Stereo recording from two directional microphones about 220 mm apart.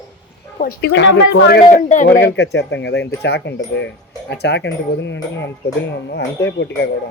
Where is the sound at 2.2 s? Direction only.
50° left (ahead or behind).